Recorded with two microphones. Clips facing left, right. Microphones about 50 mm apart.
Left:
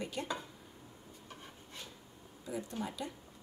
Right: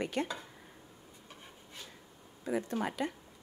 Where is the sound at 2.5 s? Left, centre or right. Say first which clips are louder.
Right 6 dB; right.